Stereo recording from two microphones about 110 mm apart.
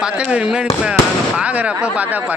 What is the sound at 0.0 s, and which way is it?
Speech, 10° right (ahead or behind).